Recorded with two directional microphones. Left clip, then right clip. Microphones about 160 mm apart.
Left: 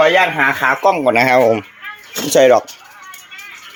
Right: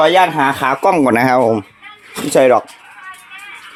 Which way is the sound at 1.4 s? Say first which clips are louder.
Left 1 dB; 20° right (ahead or behind).